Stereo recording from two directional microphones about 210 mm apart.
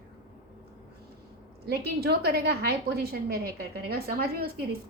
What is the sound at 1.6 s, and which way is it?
A woman's voice, 50° right (ahead or behind).